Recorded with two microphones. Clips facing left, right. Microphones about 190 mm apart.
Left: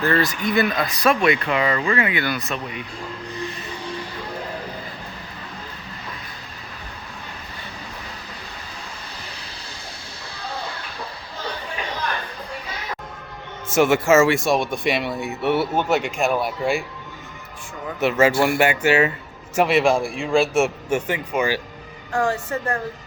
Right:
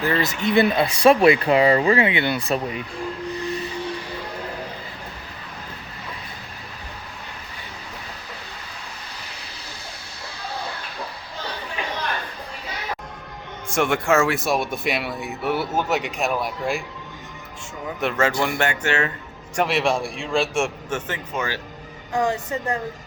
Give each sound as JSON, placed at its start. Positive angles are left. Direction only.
{"t": 0.2, "sound": "speech", "side_deg": -25}
{"t": 13.7, "sound": "speech", "side_deg": 5}
{"t": 18.0, "sound": "speech", "side_deg": 5}
{"t": 22.1, "sound": "speech", "side_deg": -20}